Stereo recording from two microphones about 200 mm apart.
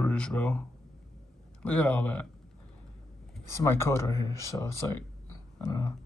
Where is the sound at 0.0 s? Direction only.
5° left (ahead or behind).